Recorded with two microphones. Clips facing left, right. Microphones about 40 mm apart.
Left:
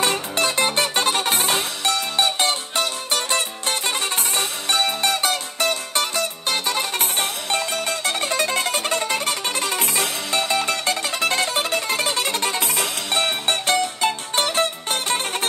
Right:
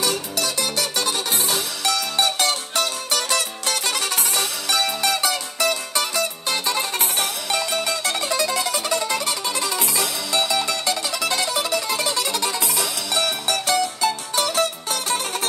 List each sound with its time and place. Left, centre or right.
0.0 s music: left